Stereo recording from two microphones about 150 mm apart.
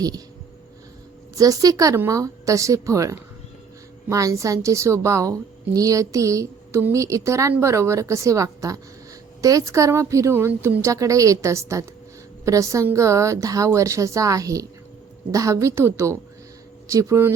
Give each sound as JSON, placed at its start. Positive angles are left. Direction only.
{"t": 1.4, "sound": "a woman's voice", "side_deg": -25}